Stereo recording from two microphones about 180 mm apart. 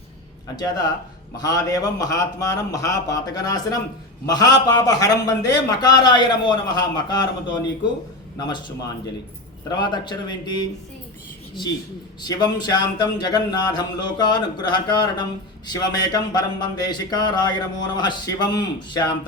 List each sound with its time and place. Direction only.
0.4 s speech: 20° left (ahead or behind)
8.4 s speech: 25° left (ahead or behind)
12.2 s speech: 25° left (ahead or behind)